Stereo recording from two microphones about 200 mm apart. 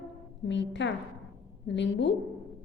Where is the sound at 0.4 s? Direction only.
65° left (ahead or behind).